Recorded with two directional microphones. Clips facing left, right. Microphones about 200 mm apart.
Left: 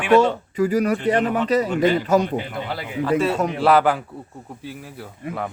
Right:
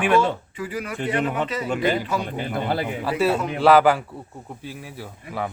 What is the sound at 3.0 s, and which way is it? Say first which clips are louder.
A man's voice: left 5 dB; 5° right (ahead or behind).